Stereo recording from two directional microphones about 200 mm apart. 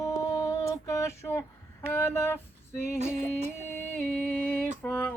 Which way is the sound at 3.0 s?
35° right (ahead or behind).